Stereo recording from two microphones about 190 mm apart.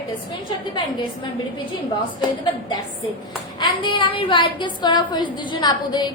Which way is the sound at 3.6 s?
25° left (ahead or behind).